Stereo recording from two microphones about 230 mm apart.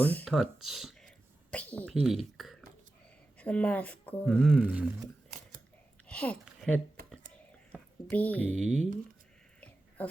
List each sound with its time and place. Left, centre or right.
0.0 s speech: centre
6.1 s speech: centre
7.1 s a sound: centre